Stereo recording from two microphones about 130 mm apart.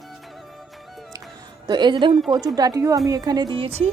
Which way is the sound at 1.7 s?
35° right (ahead or behind).